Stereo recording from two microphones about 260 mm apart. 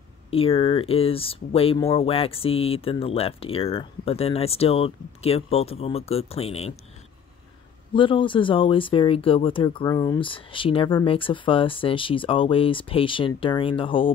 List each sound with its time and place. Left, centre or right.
0.3 s speech: left
7.9 s speech: centre